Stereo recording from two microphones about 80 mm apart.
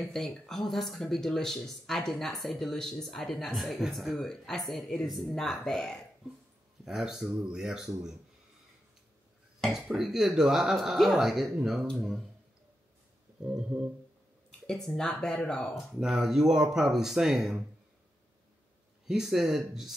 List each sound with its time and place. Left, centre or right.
0.1 s speech: centre
6.8 s speech: centre
9.6 s speech: centre
13.4 s a sound: centre
14.7 s speech: centre
15.7 s speech: centre
19.0 s speech: centre